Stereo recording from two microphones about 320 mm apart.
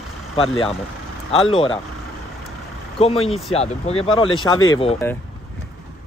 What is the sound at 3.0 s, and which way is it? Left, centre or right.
Speech, centre.